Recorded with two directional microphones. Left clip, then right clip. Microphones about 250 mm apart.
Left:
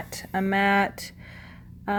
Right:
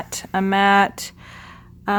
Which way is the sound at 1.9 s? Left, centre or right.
Centre.